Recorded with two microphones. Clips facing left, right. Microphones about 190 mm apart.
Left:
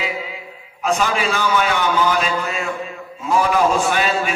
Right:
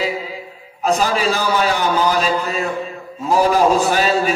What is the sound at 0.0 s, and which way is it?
A man's voice, 35° right (ahead or behind).